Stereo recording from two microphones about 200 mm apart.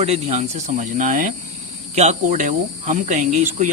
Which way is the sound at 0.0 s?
30° right (ahead or behind).